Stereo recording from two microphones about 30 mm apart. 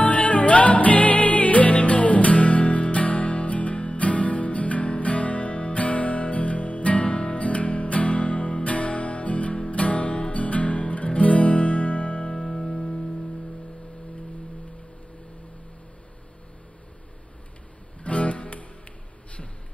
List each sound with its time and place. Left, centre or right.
0.0 s music: left
1.7 s music: left
12.4 s music: left
18.0 s guitar: left